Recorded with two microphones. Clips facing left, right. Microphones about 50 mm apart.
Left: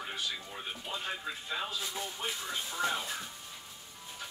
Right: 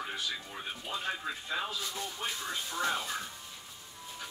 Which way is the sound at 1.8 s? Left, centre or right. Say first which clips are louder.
Even; centre.